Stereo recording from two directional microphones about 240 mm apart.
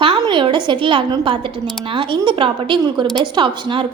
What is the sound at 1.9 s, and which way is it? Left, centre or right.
A woman's voice, right.